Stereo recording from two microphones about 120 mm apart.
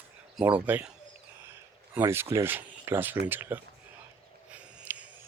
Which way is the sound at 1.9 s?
20° right (ahead or behind).